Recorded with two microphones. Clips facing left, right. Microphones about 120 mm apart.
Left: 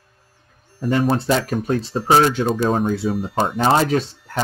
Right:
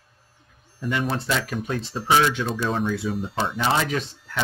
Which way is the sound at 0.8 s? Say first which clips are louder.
Left 7 dB; 40° left (ahead or behind).